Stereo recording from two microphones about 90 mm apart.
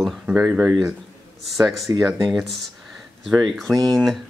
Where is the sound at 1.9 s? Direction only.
40° right (ahead or behind).